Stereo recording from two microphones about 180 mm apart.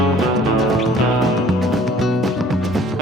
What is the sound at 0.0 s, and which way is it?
Music, centre (ahead or behind).